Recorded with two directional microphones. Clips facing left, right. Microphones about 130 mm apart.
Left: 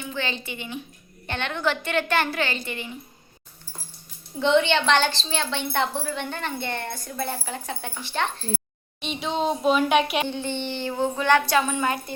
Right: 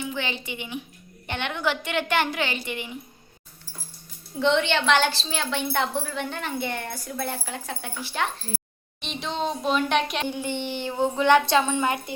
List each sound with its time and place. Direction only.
0.0 s a woman's voice: 15° right (ahead or behind)
4.4 s a woman's voice: centre (ahead or behind)
10.2 s a woman's voice: 15° right (ahead or behind)